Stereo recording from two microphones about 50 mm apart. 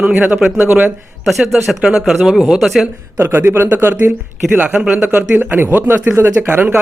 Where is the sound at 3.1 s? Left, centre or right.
Right.